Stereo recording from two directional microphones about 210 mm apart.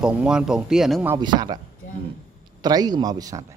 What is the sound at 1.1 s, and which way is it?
Speech, 20° right (ahead or behind).